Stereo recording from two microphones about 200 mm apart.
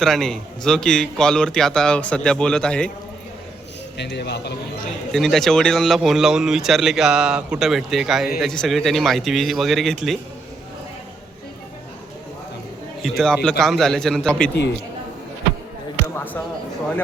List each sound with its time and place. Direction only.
0.0 s speech: centre (ahead or behind)
3.9 s speech: 60° left (ahead or behind)
5.1 s speech: centre (ahead or behind)
13.0 s speech: centre (ahead or behind)
16.1 s speech: 10° left (ahead or behind)